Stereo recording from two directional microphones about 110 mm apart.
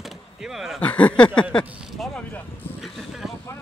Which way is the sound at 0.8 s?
10° left (ahead or behind).